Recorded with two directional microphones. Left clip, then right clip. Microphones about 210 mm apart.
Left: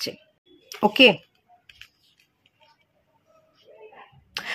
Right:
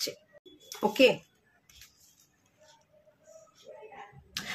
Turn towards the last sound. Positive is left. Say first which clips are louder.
# left 6 dB
turn(degrees=35)  # may be behind; listen again after turning